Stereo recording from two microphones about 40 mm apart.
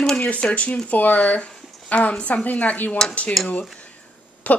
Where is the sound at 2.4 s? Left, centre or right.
Left.